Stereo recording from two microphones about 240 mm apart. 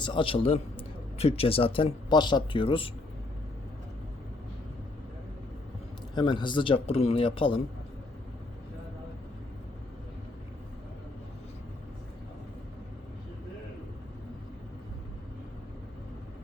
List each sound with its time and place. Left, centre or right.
0.0 s a man's voice: left
6.1 s a man's voice: centre